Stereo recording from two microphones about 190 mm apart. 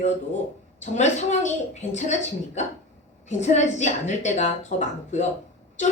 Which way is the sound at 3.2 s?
40° left (ahead or behind).